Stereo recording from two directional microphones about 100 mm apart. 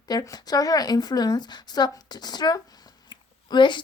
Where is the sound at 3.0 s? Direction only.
50° left (ahead or behind).